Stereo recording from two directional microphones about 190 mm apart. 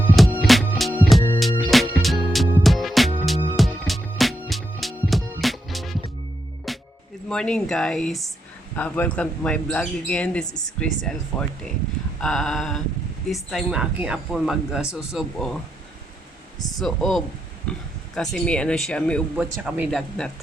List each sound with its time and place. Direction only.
0.2 s music: centre (ahead or behind)
7.3 s speech: 5° left (ahead or behind)
16.6 s speech: 20° left (ahead or behind)
16.8 s speech: centre (ahead or behind)
19.4 s speech: 5° right (ahead or behind)